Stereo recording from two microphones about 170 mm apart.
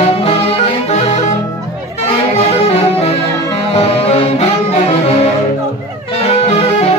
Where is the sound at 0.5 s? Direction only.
40° left (ahead or behind).